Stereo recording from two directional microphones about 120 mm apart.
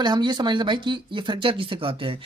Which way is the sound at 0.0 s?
40° right (ahead or behind).